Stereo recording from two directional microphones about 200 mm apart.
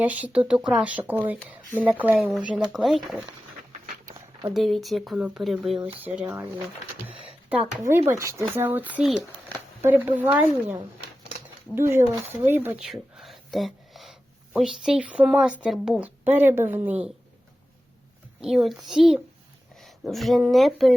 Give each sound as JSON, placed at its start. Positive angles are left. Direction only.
{"t": 0.0, "sound": "speech", "side_deg": -10}
{"t": 4.0, "sound": "a sound", "side_deg": -15}
{"t": 4.5, "sound": "speech", "side_deg": 0}
{"t": 7.9, "sound": "speech", "side_deg": -15}
{"t": 18.3, "sound": "speech", "side_deg": 0}